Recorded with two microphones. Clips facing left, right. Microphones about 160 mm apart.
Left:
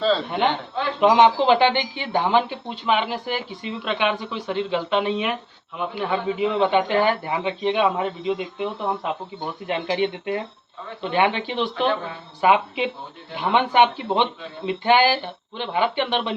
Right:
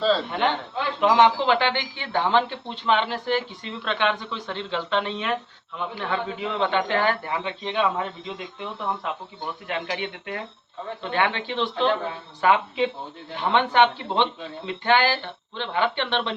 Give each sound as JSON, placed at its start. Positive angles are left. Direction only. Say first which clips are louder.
{"t": 0.9, "sound": "speech", "louder": "left 3 dB", "side_deg": 20}